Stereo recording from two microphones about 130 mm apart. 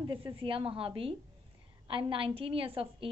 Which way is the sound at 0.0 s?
40° right (ahead or behind).